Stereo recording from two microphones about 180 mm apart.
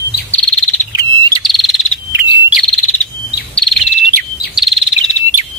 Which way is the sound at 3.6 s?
Centre (ahead or behind).